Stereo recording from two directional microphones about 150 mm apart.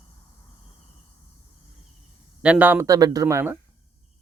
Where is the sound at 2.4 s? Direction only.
10° right (ahead or behind).